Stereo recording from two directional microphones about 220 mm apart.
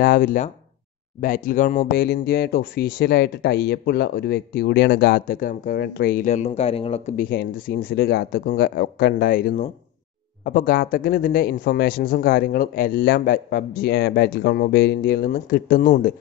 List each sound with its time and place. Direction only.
0.0 s speech: 45° left (ahead or behind)